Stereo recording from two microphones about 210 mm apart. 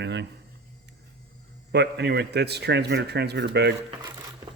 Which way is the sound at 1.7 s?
55° right (ahead or behind).